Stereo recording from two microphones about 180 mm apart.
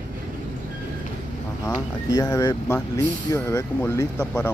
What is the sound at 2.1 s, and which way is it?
Speech, 20° left (ahead or behind).